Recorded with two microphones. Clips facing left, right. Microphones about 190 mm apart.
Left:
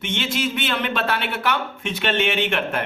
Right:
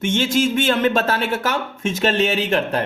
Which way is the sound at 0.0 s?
45° right (ahead or behind).